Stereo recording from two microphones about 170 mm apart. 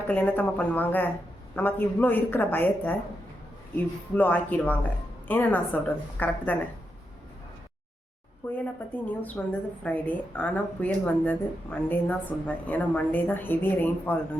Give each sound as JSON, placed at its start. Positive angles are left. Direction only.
{"t": 0.1, "sound": "a woman's voice", "side_deg": 10}
{"t": 4.1, "sound": "a woman's voice", "side_deg": 10}
{"t": 8.5, "sound": "a woman's voice", "side_deg": 10}